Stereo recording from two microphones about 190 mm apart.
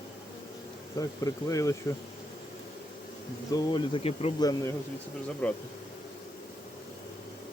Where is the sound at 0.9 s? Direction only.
15° left (ahead or behind).